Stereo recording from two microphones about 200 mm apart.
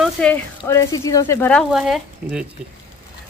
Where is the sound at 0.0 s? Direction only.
5° left (ahead or behind).